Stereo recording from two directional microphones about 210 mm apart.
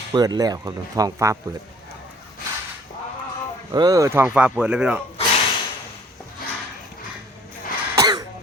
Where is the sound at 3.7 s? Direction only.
20° right (ahead or behind).